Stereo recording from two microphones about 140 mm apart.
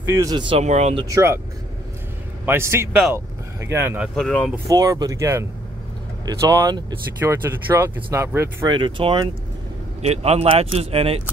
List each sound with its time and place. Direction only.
0.0 s speech: 20° right (ahead or behind)
0.6 s speech: 50° right (ahead or behind)
0.9 s speech: 25° right (ahead or behind)
2.4 s speech: 20° right (ahead or behind)
4.1 s speech: 5° left (ahead or behind)
4.6 s speech: 25° right (ahead or behind)
8.6 s speech: 35° right (ahead or behind)
10.0 s speech: 50° right (ahead or behind)